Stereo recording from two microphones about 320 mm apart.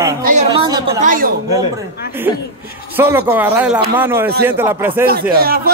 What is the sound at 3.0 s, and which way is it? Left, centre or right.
Speech, centre.